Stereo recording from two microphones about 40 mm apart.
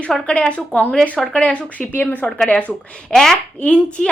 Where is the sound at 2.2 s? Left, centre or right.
Left.